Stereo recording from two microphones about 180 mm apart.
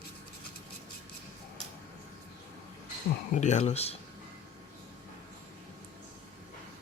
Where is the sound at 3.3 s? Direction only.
40° left (ahead or behind).